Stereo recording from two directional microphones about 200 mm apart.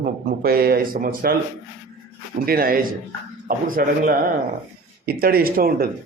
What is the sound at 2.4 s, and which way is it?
A man's voice, 45° right (ahead or behind).